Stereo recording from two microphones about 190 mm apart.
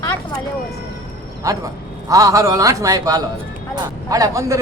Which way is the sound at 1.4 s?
20° right (ahead or behind).